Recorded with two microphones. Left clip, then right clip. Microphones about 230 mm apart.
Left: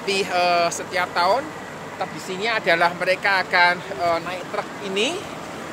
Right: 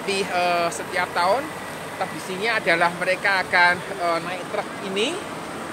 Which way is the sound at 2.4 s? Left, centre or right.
Centre.